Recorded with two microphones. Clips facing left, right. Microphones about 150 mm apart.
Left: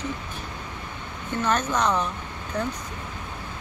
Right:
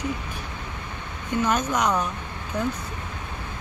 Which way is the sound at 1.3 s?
10° right (ahead or behind).